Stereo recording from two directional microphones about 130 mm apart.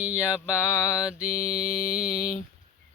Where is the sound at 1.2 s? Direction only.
80° left.